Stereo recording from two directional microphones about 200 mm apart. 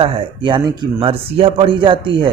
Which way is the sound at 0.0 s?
25° right (ahead or behind).